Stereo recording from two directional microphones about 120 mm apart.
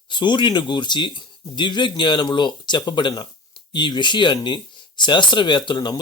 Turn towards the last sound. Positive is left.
turn(degrees=40)  # may be behind; listen again after turning